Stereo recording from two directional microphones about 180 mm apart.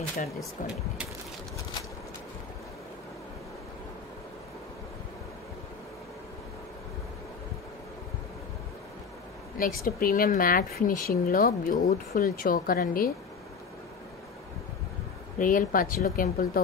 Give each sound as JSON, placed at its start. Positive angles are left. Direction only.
{"t": 9.6, "sound": "speech", "side_deg": 50}
{"t": 15.3, "sound": "speech", "side_deg": 50}